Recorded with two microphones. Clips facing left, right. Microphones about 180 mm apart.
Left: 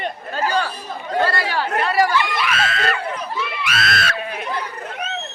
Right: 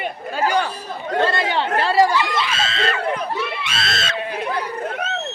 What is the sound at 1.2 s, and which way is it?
Speech, 25° right (ahead or behind).